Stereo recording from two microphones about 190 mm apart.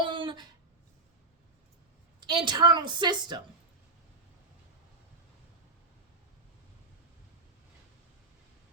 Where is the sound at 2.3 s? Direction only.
25° right (ahead or behind).